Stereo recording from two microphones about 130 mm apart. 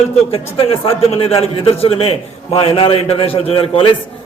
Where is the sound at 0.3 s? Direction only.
45° left (ahead or behind).